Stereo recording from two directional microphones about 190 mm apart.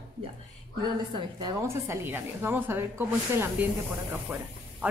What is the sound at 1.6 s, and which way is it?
Speech, 15° right (ahead or behind).